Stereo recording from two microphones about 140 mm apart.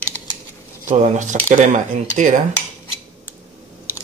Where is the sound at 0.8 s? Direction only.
60° right (ahead or behind).